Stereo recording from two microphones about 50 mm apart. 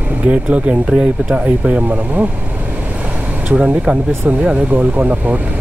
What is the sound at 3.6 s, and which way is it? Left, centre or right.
Speech, right.